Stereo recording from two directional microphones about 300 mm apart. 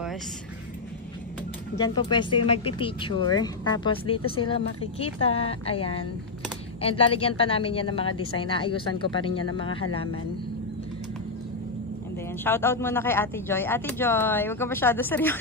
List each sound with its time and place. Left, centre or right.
1.8 s a woman's voice: centre
12.4 s speech: centre